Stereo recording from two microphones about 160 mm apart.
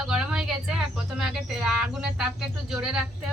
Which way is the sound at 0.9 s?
5° right (ahead or behind).